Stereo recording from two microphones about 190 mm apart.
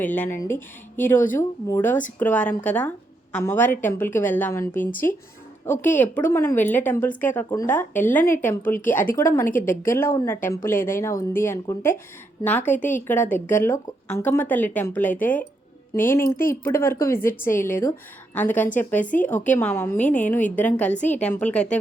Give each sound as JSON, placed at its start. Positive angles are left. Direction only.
{"t": 0.0, "sound": "a woman's voice", "side_deg": 10}
{"t": 5.8, "sound": "a woman's voice", "side_deg": 10}